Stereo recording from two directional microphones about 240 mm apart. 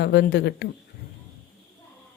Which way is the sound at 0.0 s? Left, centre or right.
Left.